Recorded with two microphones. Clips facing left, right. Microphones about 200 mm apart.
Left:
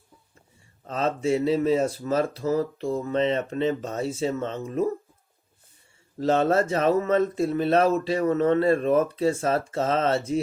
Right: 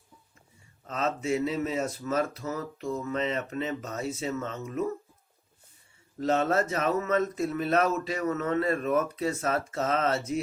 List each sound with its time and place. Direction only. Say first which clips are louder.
0.9 s speech: left 5 dB; 30° left (ahead or behind)
6.1 s speech: left 4 dB; 30° left (ahead or behind)